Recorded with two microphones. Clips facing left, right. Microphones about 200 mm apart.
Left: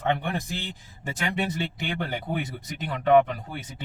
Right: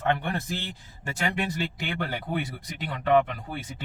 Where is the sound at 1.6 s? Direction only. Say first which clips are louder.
Left 1 dB; 20° left (ahead or behind).